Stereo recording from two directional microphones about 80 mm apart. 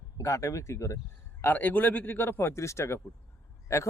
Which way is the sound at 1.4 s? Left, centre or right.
Left.